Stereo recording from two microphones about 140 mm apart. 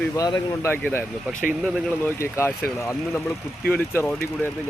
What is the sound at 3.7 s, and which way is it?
Speech, 10° left (ahead or behind).